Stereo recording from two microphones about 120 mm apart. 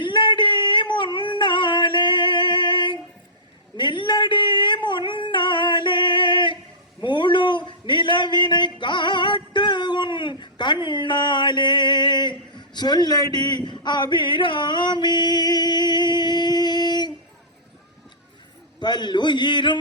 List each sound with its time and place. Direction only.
0.0 s singing: 40° left (ahead or behind)
3.8 s yodeling: 40° left (ahead or behind)
7.0 s a sound: 40° left (ahead or behind)
18.8 s a man's voice: 35° left (ahead or behind)